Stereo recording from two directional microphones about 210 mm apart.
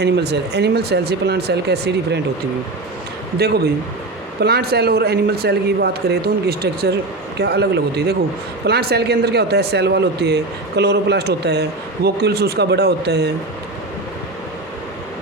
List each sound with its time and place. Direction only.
0.0 s speech: 50° right (ahead or behind)
3.3 s speech: 50° right (ahead or behind)